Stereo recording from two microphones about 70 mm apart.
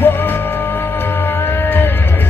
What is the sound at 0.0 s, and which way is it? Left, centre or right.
Music, left.